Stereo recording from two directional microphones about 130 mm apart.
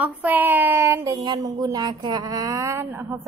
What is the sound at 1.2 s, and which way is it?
A woman's voice, 30° right (ahead or behind).